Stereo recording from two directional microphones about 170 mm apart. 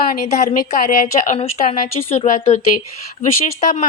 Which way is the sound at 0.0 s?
50° left (ahead or behind).